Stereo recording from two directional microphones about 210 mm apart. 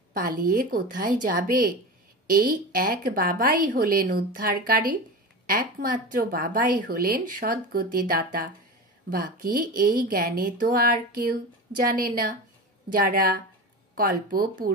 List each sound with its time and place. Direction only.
0.1 s a woman's voice: 45° right (ahead or behind)